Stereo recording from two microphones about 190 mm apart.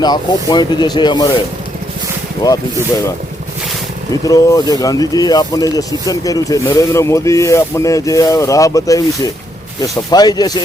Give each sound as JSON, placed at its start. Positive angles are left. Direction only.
{"t": 0.0, "sound": "speech", "side_deg": 20}
{"t": 2.4, "sound": "speech", "side_deg": 20}
{"t": 4.1, "sound": "speech", "side_deg": 20}